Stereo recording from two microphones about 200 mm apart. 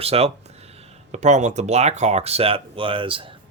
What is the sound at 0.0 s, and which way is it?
Speech, 30° right (ahead or behind).